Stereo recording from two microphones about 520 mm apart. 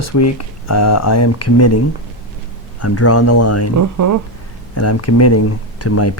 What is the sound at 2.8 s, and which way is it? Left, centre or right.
Speech, left.